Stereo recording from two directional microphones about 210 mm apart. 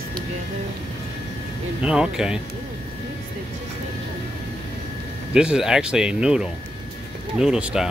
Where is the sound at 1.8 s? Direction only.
5° right (ahead or behind).